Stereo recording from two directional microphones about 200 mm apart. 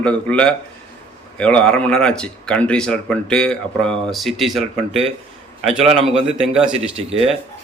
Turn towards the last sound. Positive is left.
turn(degrees=-30)  # may be behind; listen again after turning